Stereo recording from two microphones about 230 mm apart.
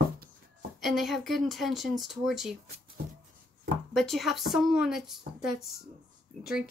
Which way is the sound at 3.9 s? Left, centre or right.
Centre.